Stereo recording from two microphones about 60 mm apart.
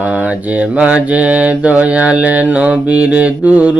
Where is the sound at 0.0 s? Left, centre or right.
Right.